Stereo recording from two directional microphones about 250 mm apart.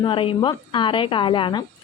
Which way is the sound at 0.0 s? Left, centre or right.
Left.